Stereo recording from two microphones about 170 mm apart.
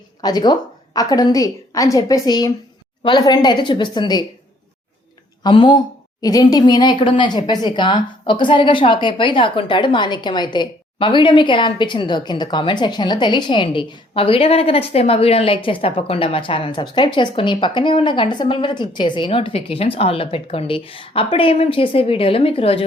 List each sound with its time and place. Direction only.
0.2 s speech: 25° left (ahead or behind)
5.4 s speech: 25° left (ahead or behind)